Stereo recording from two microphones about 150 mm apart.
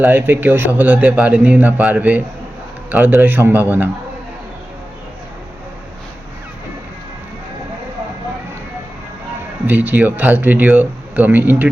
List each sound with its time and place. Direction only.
0.0 s a man's voice: 10° right (ahead or behind)
9.6 s a man's voice: 10° right (ahead or behind)